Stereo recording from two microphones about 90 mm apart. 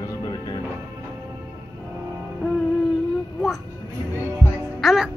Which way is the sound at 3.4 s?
Centre (ahead or behind).